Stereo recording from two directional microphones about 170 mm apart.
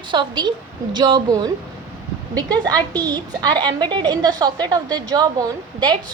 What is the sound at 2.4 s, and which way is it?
Speech, 10° left (ahead or behind).